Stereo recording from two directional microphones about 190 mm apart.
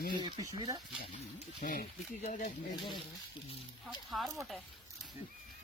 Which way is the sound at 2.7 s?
25° left (ahead or behind).